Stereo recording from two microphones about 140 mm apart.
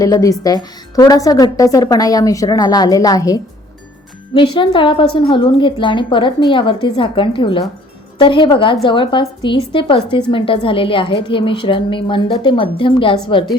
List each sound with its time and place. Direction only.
0.0 s a woman's voice: 25° left (ahead or behind)
4.4 s a woman's voice: 35° left (ahead or behind)